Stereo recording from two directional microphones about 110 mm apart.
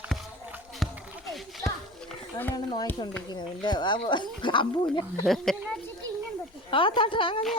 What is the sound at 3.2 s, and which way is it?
Speech, 40° left (ahead or behind).